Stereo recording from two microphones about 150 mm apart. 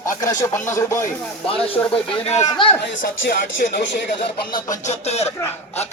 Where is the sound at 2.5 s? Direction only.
35° left (ahead or behind).